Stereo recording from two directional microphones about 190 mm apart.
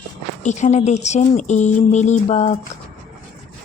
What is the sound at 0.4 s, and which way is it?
Speech, 40° left (ahead or behind).